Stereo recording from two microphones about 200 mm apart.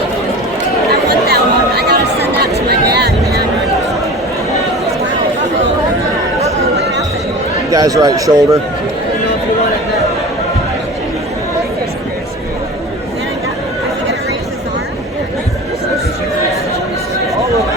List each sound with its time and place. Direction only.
0.9 s chatter: 55° right (ahead or behind)
6.7 s music: 55° right (ahead or behind)
7.7 s speech: 15° right (ahead or behind)